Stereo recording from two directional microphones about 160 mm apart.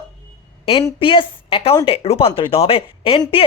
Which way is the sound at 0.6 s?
35° left (ahead or behind).